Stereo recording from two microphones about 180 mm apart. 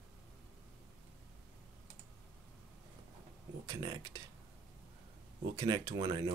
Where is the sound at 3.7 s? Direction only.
25° right (ahead or behind).